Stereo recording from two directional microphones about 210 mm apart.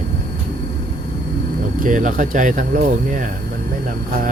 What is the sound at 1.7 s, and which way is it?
Speech, 40° right (ahead or behind).